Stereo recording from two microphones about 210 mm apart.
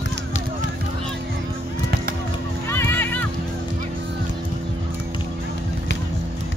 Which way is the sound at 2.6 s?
10° left (ahead or behind).